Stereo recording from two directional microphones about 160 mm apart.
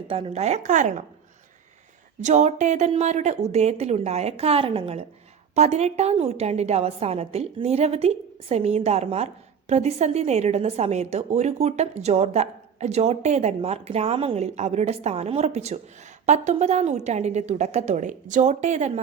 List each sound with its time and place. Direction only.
0.1 s a woman's voice: 35° right (ahead or behind)
2.2 s a woman's voice: 45° right (ahead or behind)